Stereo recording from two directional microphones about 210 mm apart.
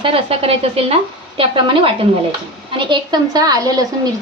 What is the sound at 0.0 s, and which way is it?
Speech, 25° right (ahead or behind).